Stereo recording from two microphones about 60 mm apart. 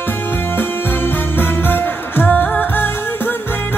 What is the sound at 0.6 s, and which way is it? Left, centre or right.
Music, left.